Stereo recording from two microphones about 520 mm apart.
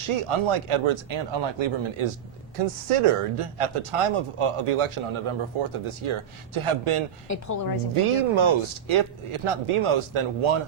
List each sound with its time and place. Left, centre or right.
0.0 s speech: right
2.6 s speech: right
7.3 s a woman's voice: left
8.1 s speech: right